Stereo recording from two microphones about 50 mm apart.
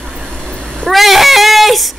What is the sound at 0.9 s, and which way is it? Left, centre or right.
A woman's voice, centre.